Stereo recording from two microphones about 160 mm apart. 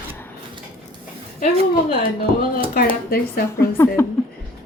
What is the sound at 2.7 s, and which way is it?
Speech, 65° left (ahead or behind).